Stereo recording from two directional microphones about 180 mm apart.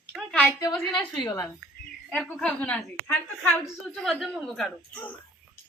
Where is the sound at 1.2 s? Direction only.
15° left (ahead or behind).